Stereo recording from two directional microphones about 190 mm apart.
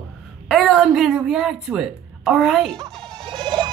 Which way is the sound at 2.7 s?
20° right (ahead or behind).